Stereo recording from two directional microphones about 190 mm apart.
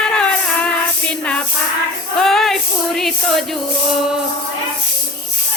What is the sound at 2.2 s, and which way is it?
Music, centre (ahead or behind).